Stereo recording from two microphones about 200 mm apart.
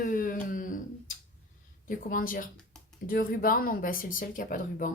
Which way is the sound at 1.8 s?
45° left (ahead or behind).